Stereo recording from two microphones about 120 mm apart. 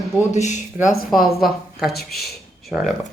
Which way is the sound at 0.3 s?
80° left.